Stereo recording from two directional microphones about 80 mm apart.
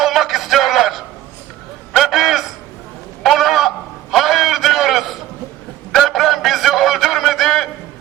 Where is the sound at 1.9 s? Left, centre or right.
Centre.